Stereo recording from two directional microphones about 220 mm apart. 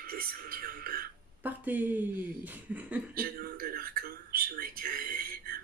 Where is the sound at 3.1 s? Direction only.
40° right (ahead or behind).